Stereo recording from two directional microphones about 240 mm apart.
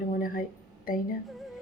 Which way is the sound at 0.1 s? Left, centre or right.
Left.